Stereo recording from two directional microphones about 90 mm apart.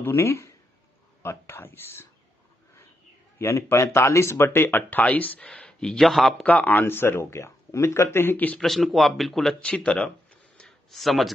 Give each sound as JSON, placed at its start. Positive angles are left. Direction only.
{"t": 0.0, "sound": "speech", "side_deg": 30}
{"t": 3.3, "sound": "speech", "side_deg": 30}
{"t": 6.4, "sound": "speech", "side_deg": 20}
{"t": 8.5, "sound": "speech", "side_deg": 0}
{"t": 9.7, "sound": "speech", "side_deg": 15}
{"t": 10.6, "sound": "a sound", "side_deg": 0}